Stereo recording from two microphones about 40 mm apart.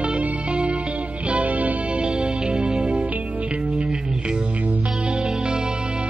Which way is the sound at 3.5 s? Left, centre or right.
Right.